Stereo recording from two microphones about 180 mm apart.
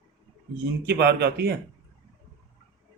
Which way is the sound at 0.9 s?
65° right (ahead or behind).